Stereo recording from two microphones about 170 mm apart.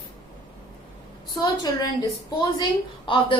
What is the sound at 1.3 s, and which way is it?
A woman's voice, 25° left (ahead or behind).